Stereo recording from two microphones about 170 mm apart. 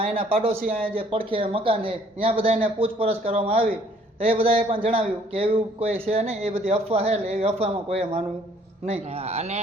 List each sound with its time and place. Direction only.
0.0 s a man's voice: 35° right (ahead or behind)